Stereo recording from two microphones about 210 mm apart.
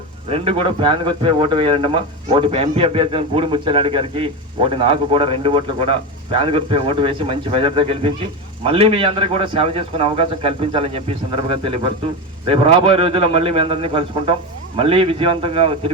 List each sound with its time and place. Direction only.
0.3 s speech: 25° right (ahead or behind)
12.5 s speech: 25° right (ahead or behind)